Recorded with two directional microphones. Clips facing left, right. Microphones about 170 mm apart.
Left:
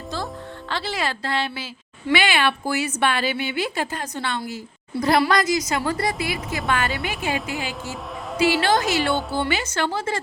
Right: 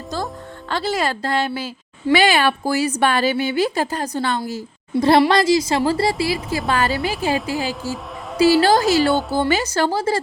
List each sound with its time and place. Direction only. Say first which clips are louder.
0.7 s a woman's voice: right 5 dB; 40° right (ahead or behind)